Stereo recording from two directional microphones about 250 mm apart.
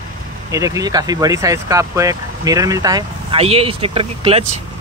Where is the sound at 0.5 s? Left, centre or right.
Centre.